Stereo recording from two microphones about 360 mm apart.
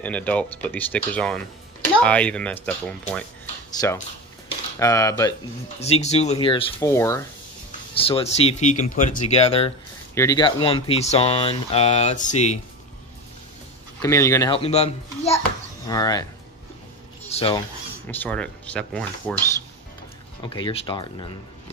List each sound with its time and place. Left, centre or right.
0.0 s speech: centre
4.5 s speech: centre
14.0 s speech: centre
17.3 s speech: centre
18.0 s speech: centre
20.4 s speech: centre